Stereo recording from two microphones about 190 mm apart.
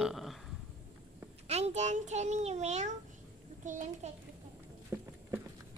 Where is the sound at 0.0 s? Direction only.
Centre (ahead or behind).